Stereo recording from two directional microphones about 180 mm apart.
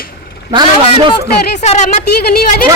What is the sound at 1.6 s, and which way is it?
Speech, 40° left (ahead or behind).